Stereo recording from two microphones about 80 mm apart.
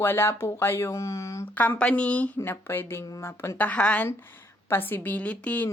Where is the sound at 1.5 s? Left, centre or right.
Left.